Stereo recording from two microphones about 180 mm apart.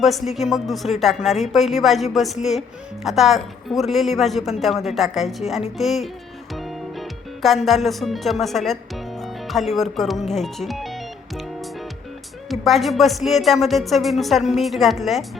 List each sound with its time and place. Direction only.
0.0 s speech: centre (ahead or behind)
6.5 s music: centre (ahead or behind)
12.5 s speech: centre (ahead or behind)